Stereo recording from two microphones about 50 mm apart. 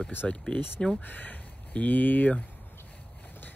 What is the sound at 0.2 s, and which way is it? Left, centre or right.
Speech, centre.